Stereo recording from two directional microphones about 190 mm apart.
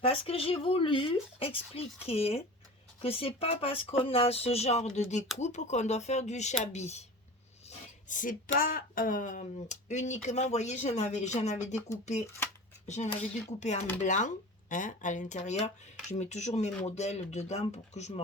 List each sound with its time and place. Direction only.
0.0 s speech: 30° left (ahead or behind)
8.0 s speech: 45° left (ahead or behind)
12.9 s speech: 40° left (ahead or behind)